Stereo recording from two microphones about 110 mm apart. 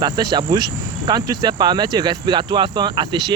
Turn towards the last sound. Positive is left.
turn(degrees=-40)  # may be behind; listen again after turning